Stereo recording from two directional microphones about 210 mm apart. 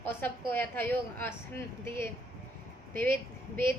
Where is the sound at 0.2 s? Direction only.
10° left (ahead or behind).